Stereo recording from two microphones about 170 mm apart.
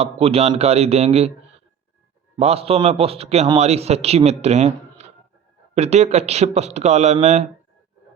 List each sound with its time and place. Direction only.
0.0 s a man's voice: 35° right (ahead or behind)